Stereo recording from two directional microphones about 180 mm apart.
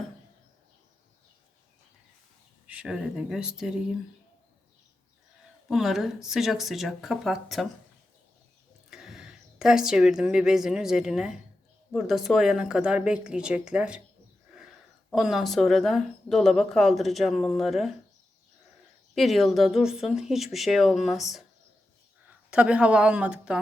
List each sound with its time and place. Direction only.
2.6 s speech: 5° right (ahead or behind)
5.6 s speech: centre (ahead or behind)
8.9 s speech: centre (ahead or behind)
15.1 s speech: centre (ahead or behind)
19.1 s speech: centre (ahead or behind)
22.4 s speech: 5° right (ahead or behind)